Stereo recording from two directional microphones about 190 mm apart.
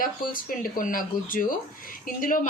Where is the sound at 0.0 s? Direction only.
45° left (ahead or behind).